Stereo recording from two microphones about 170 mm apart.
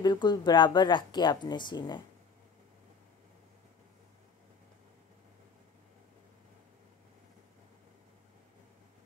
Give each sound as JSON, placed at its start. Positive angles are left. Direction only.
{"t": 0.0, "sound": "a woman's voice", "side_deg": 25}